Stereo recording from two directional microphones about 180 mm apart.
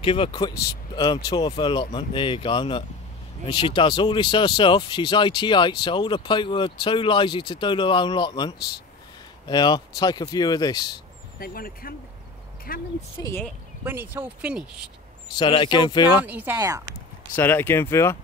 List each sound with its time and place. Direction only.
0.0 s speech: 30° left (ahead or behind)
11.3 s speech: 55° left (ahead or behind)
13.2 s speech: 15° left (ahead or behind)
13.8 s speech: 10° right (ahead or behind)
15.3 s speech: 25° left (ahead or behind)
16.3 s speech: 10° right (ahead or behind)
17.4 s speech: 10° left (ahead or behind)